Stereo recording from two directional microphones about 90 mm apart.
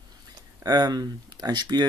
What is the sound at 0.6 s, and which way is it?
Speech, 45° right (ahead or behind).